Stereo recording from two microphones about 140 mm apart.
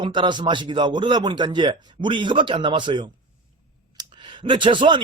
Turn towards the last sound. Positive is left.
turn(degrees=-35)  # may be behind; listen again after turning